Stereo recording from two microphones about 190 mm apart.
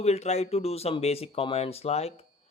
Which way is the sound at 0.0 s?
35° left (ahead or behind).